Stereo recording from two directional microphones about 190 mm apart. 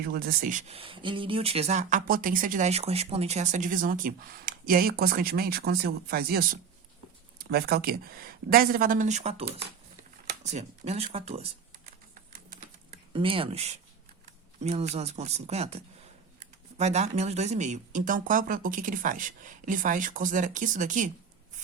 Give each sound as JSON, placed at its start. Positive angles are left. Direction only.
{"t": 0.0, "sound": "speech", "side_deg": -50}
{"t": 0.7, "sound": "speech", "side_deg": -30}
{"t": 12.3, "sound": "typing", "side_deg": -45}
{"t": 13.1, "sound": "speech", "side_deg": -30}